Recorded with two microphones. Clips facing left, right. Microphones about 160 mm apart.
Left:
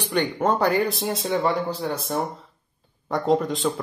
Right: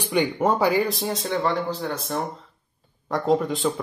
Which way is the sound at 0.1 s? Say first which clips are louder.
Right 1 dB; 10° right (ahead or behind).